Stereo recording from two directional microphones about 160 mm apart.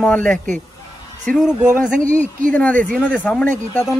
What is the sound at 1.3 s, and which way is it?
Speech, 5° right (ahead or behind).